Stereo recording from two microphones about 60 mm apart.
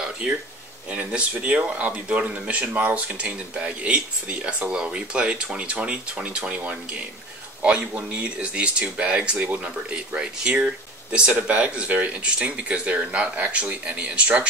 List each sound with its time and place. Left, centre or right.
0.2 s speech: centre